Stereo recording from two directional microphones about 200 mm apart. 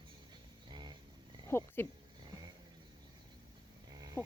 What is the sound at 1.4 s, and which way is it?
Speech, 10° left (ahead or behind).